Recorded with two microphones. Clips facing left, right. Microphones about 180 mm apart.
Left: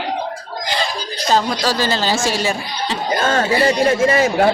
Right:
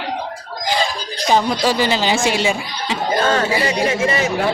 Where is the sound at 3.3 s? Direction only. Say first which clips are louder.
Left 2 dB; 45° left (ahead or behind).